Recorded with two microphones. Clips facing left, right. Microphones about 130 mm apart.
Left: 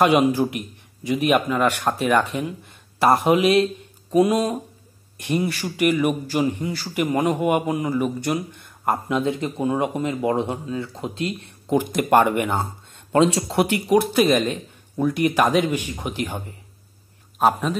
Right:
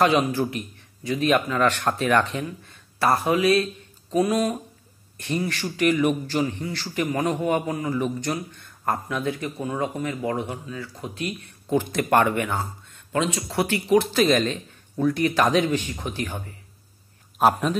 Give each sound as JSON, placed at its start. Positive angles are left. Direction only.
{"t": 0.0, "sound": "a man's voice", "side_deg": 15}
{"t": 11.7, "sound": "a man's voice", "side_deg": 15}
{"t": 13.1, "sound": "speech", "side_deg": 35}
{"t": 13.5, "sound": "a man's voice", "side_deg": 15}
{"t": 17.4, "sound": "a man's voice", "side_deg": 0}